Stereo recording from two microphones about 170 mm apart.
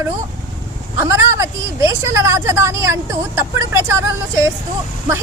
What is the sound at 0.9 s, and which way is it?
A woman's voice, 15° right (ahead or behind).